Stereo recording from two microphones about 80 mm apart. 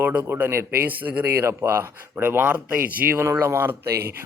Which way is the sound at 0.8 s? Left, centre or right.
Centre.